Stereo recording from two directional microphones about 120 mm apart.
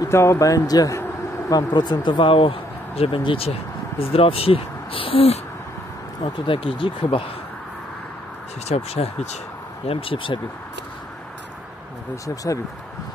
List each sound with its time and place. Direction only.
0.0 s speech: 25° left (ahead or behind); by 7.2 s 45° left (ahead or behind)
8.6 s speech: 60° left (ahead or behind)
9.8 s speech: 50° left (ahead or behind)